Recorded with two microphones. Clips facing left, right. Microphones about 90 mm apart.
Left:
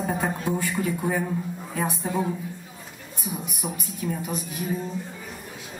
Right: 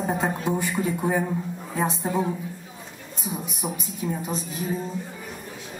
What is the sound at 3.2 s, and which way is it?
A woman's voice, 20° right (ahead or behind).